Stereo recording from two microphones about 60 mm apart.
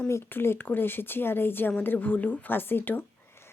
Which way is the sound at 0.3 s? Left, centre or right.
Left.